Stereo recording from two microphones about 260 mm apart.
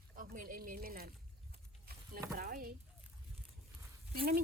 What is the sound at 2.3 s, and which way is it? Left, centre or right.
Speech, right.